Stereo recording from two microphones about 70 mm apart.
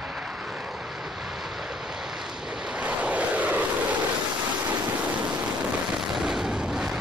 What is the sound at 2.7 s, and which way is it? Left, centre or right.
Vehicle, centre.